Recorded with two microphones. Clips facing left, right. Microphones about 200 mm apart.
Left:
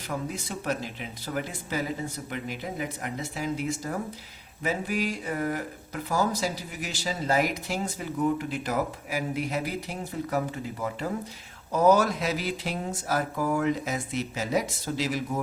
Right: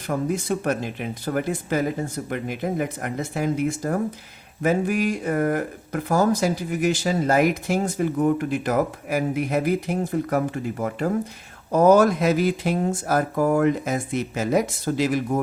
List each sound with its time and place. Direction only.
0.1 s speech: 50° right (ahead or behind)